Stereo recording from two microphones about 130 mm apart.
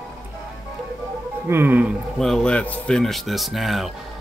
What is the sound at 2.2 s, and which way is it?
Speech, 5° left (ahead or behind).